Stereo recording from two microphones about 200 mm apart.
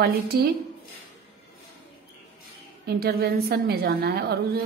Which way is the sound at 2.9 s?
50° right (ahead or behind).